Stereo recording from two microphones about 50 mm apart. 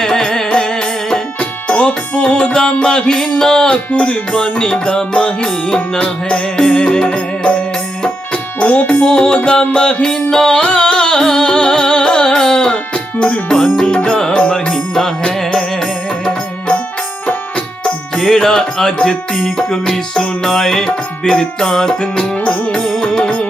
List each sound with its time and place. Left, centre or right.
0.0 s music: centre
3.9 s music: left
12.7 s music: left
18.4 s music: centre
22.8 s music: centre